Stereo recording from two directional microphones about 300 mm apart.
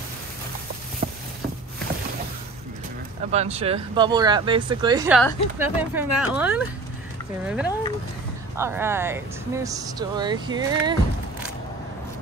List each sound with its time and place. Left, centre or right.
3.3 s speech: right